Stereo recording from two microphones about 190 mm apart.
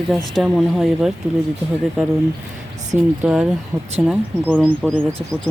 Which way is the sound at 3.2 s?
5° right (ahead or behind).